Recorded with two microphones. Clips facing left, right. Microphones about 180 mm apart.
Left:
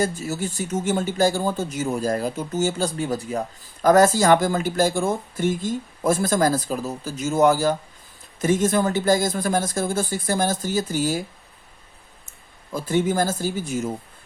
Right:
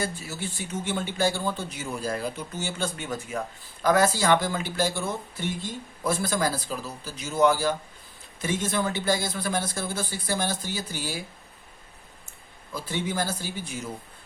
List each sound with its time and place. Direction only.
0.0 s speech: 45° left (ahead or behind)
12.7 s speech: 45° left (ahead or behind)